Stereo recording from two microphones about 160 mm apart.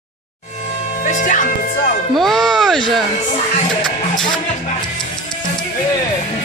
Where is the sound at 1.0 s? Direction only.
50° left (ahead or behind).